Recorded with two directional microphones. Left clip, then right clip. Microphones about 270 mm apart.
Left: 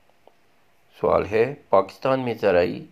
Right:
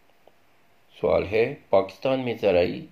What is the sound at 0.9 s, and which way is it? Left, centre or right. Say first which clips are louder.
Speech: left 2 dB; centre.